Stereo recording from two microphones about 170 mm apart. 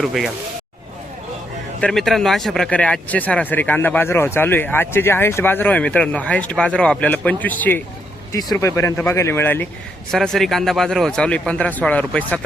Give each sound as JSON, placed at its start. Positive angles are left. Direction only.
{"t": 0.0, "sound": "speech", "side_deg": 0}
{"t": 1.8, "sound": "speech", "side_deg": 0}